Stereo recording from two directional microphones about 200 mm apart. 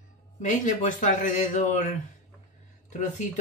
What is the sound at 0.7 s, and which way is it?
Speech, 40° left (ahead or behind).